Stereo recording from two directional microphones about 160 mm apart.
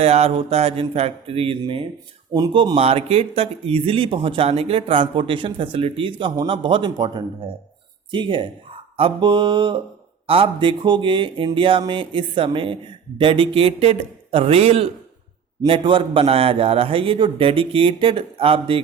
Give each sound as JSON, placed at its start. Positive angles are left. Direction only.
{"t": 0.0, "sound": "speech", "side_deg": -40}